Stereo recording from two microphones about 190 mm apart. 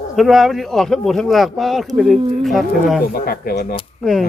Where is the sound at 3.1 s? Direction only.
50° left (ahead or behind).